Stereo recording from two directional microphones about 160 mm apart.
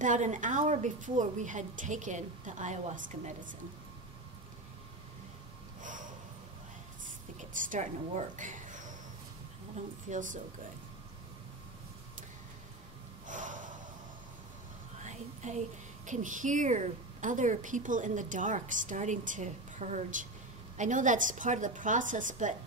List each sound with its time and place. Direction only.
0.0 s a woman's voice: 50° right (ahead or behind)
5.8 s snort: 55° right (ahead or behind)
7.3 s a woman's voice: 50° right (ahead or behind)
8.4 s a sound: 50° right (ahead or behind)
10.0 s a woman's voice: 50° right (ahead or behind)
13.3 s gasp: 55° right (ahead or behind)
15.0 s a woman's voice: 45° right (ahead or behind)